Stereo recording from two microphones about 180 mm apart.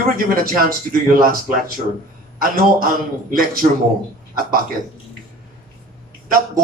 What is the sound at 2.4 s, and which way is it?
A man's voice, 55° right (ahead or behind).